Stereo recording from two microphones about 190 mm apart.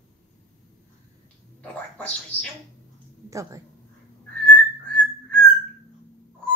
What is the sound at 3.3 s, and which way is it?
Speech, 15° right (ahead or behind).